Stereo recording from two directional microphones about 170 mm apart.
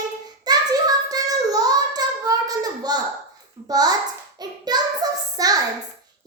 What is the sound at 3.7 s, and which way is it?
Speech, 20° right (ahead or behind).